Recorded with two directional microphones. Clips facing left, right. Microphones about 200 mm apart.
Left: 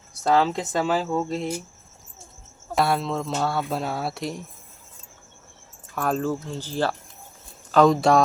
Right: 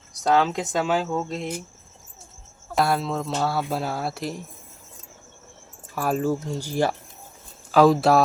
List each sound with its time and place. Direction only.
0.2 s speech: centre (ahead or behind)
2.7 s speech: centre (ahead or behind)
5.9 s speech: 5° right (ahead or behind)